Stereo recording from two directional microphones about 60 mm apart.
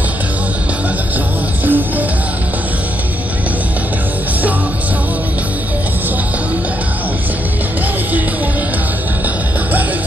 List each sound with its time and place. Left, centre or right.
1.7 s music: right